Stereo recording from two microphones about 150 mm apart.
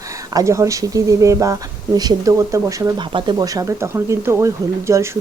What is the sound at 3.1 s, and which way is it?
Speech, 30° right (ahead or behind).